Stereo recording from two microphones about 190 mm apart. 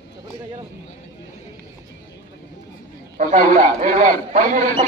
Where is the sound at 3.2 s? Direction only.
40° right (ahead or behind).